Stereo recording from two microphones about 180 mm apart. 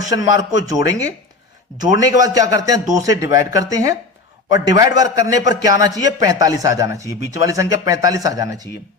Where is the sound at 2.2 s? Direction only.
20° right (ahead or behind).